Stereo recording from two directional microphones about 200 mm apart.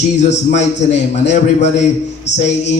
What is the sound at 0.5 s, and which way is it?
A man's voice, 35° left (ahead or behind).